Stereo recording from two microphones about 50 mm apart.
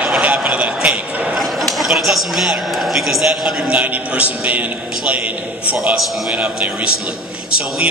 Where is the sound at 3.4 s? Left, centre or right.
Centre.